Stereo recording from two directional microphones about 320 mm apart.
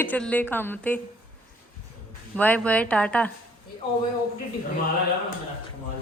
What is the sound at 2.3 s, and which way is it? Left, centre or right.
Speech, centre.